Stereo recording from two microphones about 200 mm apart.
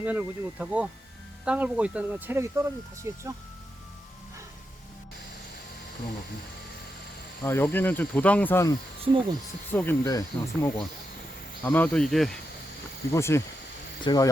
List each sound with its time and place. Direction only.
0.0 s speech: 10° right (ahead or behind)
7.4 s speech: 10° left (ahead or behind)
9.1 s speech: 25° right (ahead or behind)
9.7 s speech: 15° left (ahead or behind)
13.1 s speech: 15° left (ahead or behind)